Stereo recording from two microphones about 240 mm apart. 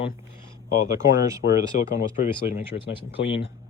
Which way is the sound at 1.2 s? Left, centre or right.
Centre.